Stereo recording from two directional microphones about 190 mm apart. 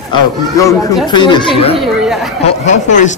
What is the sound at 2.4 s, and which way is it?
Speech, 40° left (ahead or behind).